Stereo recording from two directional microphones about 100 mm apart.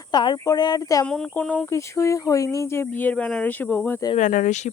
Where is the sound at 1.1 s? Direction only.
5° left (ahead or behind).